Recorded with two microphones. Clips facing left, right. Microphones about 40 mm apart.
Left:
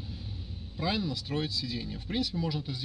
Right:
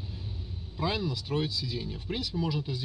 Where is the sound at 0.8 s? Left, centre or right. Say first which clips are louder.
Right 1 dB; centre.